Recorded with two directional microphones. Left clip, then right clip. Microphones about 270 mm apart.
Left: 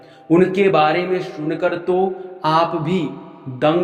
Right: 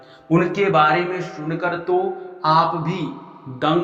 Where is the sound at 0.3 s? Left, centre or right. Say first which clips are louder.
Left 4 dB; left.